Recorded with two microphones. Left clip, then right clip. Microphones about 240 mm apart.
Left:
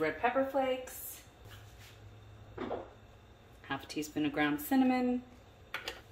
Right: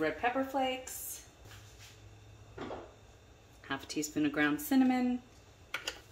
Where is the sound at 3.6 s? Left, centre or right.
Centre.